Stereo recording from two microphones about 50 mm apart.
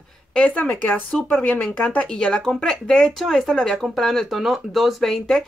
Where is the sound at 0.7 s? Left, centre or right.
Left.